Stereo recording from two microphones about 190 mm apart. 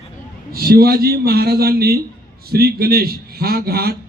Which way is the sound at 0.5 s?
55° right (ahead or behind).